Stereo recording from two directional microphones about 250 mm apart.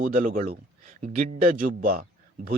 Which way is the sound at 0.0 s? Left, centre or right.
Right.